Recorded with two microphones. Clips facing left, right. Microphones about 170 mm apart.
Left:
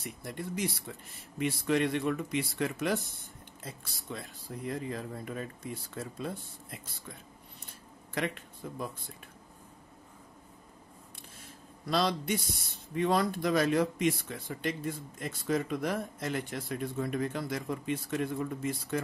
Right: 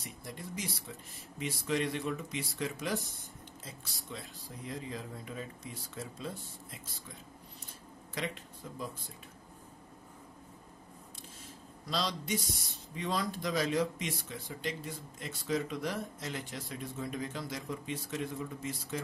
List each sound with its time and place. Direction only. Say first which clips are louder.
0.0 s speech: left 5 dB; 60° left (ahead or behind)
4.1 s speech: left 5 dB; 55° left (ahead or behind)
8.1 s speech: left 5 dB; 60° left (ahead or behind)
11.9 s speech: left 5 dB; 55° left (ahead or behind)